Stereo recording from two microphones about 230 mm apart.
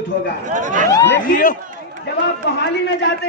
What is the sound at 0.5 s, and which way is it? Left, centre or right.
Speech, right.